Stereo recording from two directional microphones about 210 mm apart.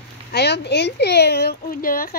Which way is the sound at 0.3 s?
50° left (ahead or behind).